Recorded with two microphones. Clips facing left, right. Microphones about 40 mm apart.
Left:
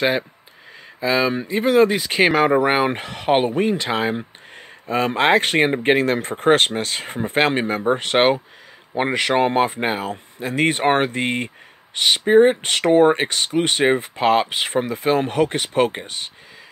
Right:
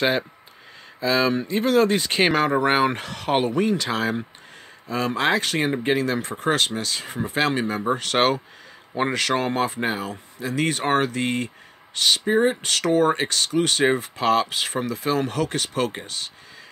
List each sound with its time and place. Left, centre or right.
1.0 s speech: centre
4.8 s speech: left
7.8 s speech: left